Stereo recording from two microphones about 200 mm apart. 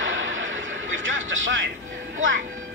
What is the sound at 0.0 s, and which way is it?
Music, 75° right (ahead or behind).